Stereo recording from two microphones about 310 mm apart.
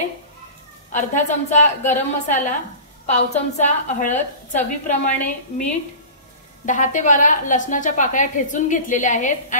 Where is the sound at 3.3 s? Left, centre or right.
Left.